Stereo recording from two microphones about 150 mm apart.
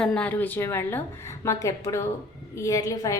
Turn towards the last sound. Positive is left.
turn(degrees=20)  # may be behind; listen again after turning